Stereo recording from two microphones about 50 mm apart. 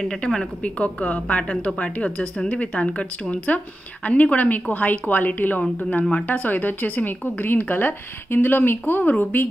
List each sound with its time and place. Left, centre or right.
0.2 s a woman's voice: centre
0.7 s a woman's voice: left